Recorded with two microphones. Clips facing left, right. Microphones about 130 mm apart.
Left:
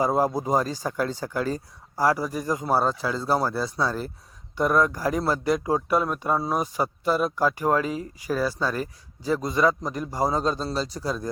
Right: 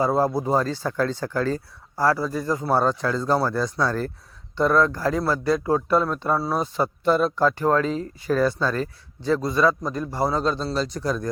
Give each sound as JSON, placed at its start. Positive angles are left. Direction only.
{"t": 0.0, "sound": "speech", "side_deg": 15}